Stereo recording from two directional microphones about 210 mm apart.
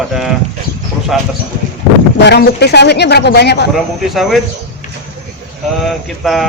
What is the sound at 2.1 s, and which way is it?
Speech, 50° left (ahead or behind).